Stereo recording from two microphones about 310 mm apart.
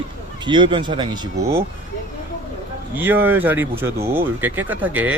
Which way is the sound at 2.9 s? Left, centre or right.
Centre.